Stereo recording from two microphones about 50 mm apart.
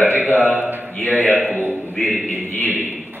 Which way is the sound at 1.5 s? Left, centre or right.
Right.